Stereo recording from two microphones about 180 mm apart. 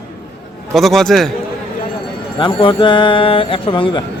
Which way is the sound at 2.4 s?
25° left (ahead or behind).